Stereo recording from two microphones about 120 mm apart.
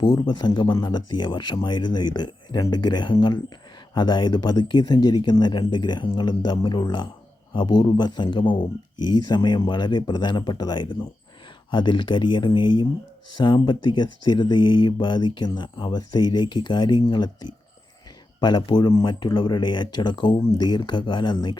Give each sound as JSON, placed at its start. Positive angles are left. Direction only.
{"t": 0.0, "sound": "speech", "side_deg": 35}
{"t": 18.3, "sound": "speech", "side_deg": 35}